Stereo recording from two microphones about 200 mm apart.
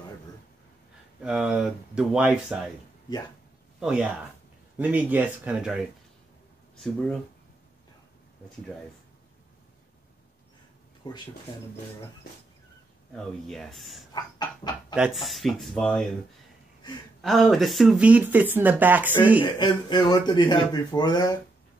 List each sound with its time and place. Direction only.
1.2 s speech: 5° right (ahead or behind)
3.8 s speech: 5° right (ahead or behind)
11.0 s speech: 20° left (ahead or behind)
13.1 s speech: centre (ahead or behind)
14.1 s speech: 20° left (ahead or behind)
15.0 s speech: centre (ahead or behind)
17.2 s speech: centre (ahead or behind)
19.4 s speech: 20° left (ahead or behind)